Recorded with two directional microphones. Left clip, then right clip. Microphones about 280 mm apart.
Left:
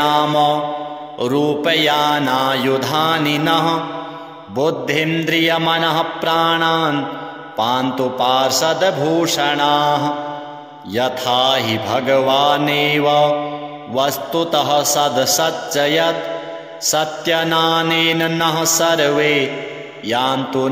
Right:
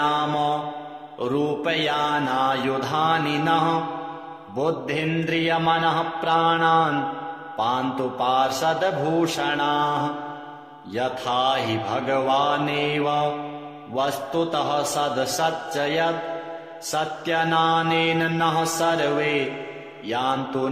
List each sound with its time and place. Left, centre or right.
0.0 s mantra: left